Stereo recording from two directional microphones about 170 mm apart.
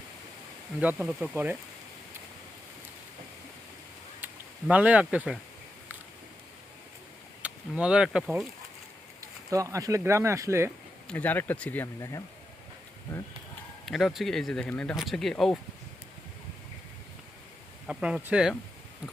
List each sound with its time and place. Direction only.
0.8 s speech: 10° right (ahead or behind)
4.7 s speech: 10° right (ahead or behind)
7.4 s speech: 5° right (ahead or behind)
9.5 s speech: 20° right (ahead or behind)
11.1 s speech: 10° left (ahead or behind)
13.8 s speech: centre (ahead or behind)
17.8 s speech: 5° right (ahead or behind)